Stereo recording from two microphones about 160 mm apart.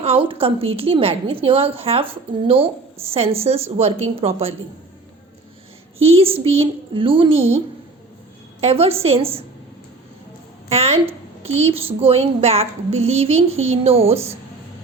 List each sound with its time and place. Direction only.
0.0 s a woman's voice: 35° right (ahead or behind)
6.0 s a woman's voice: 35° right (ahead or behind)
8.6 s a woman's voice: 40° right (ahead or behind)
10.7 s a woman's voice: 40° right (ahead or behind)